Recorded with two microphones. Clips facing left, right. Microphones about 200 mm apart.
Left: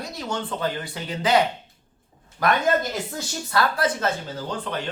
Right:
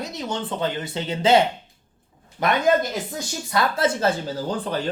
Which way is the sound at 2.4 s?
20° right (ahead or behind).